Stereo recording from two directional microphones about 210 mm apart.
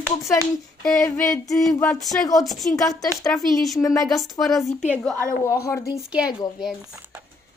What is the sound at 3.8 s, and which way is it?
Speech, 15° left (ahead or behind).